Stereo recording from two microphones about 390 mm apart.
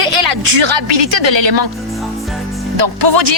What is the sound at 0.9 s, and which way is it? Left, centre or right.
Speech, right.